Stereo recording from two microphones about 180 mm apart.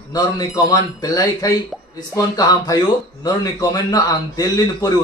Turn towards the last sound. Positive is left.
turn(degrees=20)  # may be behind; listen again after turning